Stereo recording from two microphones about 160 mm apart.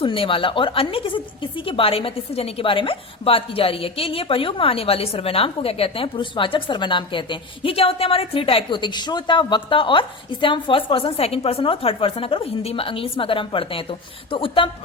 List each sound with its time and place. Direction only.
0.0 s a woman's voice: 35° left (ahead or behind)